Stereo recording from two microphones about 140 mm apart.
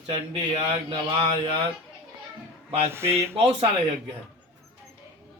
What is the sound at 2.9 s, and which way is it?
Speech, 15° right (ahead or behind).